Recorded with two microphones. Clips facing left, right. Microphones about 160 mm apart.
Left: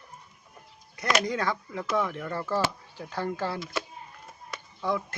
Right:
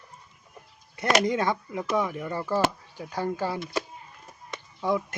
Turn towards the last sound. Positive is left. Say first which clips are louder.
# right 3 dB
turn(degrees=-20)  # may be behind; listen again after turning